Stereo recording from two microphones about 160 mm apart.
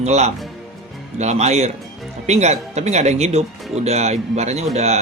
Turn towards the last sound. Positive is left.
turn(degrees=-45)  # may be behind; listen again after turning